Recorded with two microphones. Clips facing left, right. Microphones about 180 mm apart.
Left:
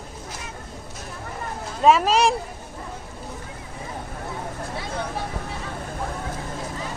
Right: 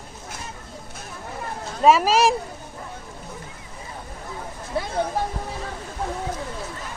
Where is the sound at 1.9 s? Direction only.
Centre (ahead or behind).